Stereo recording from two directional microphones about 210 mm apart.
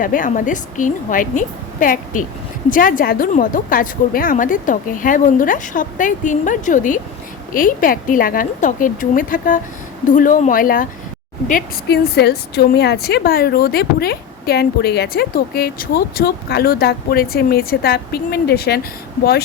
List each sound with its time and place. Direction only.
0.0 s a woman's voice: 40° left (ahead or behind)